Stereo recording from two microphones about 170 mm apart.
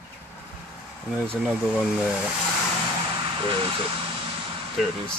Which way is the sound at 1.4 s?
10° right (ahead or behind).